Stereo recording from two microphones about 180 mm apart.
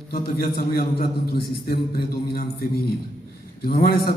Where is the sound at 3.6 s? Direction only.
60° left (ahead or behind).